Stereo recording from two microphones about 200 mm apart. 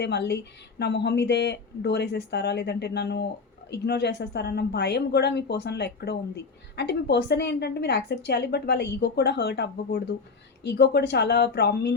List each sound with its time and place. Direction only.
0.0 s a woman's voice: 60° left (ahead or behind)